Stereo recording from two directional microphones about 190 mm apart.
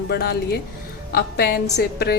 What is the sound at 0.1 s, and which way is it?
A woman's voice, 55° left (ahead or behind).